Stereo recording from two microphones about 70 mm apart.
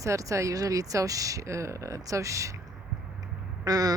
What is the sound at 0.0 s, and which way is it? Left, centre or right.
Speech, right.